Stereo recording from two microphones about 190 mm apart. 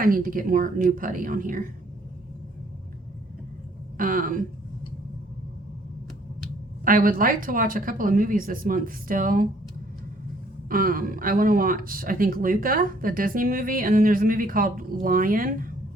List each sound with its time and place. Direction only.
0.0 s speech: 45° right (ahead or behind)
3.9 s speech: 45° right (ahead or behind)
6.8 s speech: 45° right (ahead or behind)
10.7 s speech: 50° right (ahead or behind)